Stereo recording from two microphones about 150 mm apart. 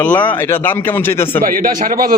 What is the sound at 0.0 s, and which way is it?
A man's voice, 10° left (ahead or behind).